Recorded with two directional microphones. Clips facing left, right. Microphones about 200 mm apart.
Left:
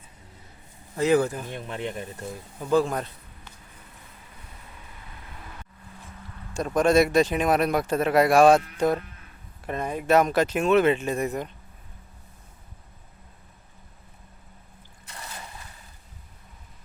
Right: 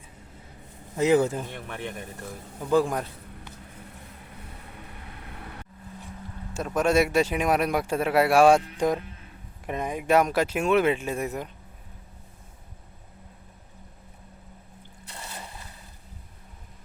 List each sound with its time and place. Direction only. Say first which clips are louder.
0.9 s speech: even; 20° right (ahead or behind)
1.5 s speech: left 3 dB; 20° left (ahead or behind)
2.6 s a man's voice: even; 15° right (ahead or behind)
4.2 s vehicle: right 4 dB; 55° right (ahead or behind)
6.7 s speech: left 3 dB; 10° right (ahead or behind)